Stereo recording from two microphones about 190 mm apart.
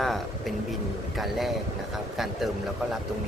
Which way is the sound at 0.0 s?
Centre (ahead or behind).